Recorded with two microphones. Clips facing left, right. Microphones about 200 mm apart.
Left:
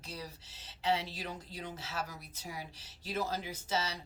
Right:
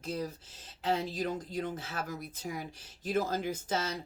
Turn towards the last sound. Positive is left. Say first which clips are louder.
# right 3 dB
turn(degrees=-50)  # may be behind; listen again after turning